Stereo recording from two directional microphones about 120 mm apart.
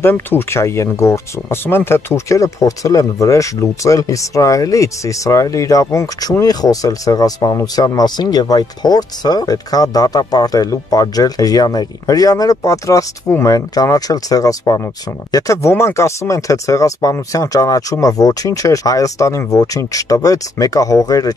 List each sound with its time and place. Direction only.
0.0 s speech: 20° left (ahead or behind)